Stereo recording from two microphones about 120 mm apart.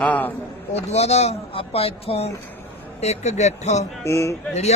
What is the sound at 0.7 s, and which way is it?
Speech, 65° left (ahead or behind).